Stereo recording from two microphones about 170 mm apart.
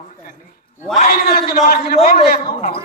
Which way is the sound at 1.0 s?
60° left (ahead or behind).